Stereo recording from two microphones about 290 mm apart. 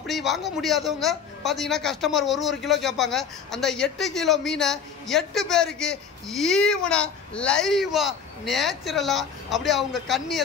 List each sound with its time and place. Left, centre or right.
0.0 s a man's voice: centre